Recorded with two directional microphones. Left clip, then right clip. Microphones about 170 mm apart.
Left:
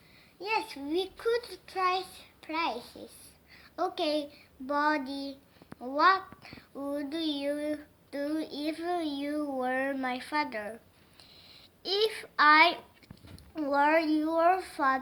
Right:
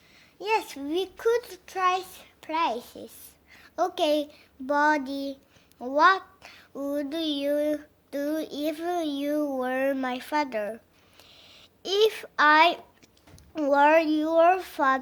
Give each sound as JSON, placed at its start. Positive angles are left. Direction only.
{"t": 0.3, "sound": "a child's voice", "side_deg": -60}
{"t": 11.2, "sound": "a sound", "side_deg": -55}
{"t": 13.5, "sound": "a child's voice", "side_deg": -45}